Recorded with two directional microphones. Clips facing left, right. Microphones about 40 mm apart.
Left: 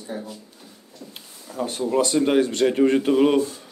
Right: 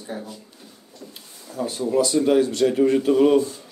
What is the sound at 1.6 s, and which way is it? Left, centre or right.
Speech, left.